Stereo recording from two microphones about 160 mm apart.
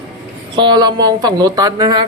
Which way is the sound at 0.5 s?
30° right (ahead or behind).